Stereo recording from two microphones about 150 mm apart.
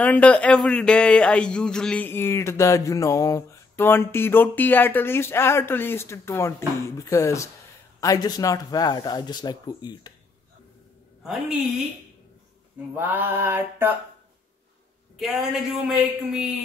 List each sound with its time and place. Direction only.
0.0 s a man's voice: 10° left (ahead or behind); by 10.1 s 25° left (ahead or behind)
11.2 s speech: centre (ahead or behind)
12.9 s mantra: 10° right (ahead or behind)
15.1 s speech: centre (ahead or behind)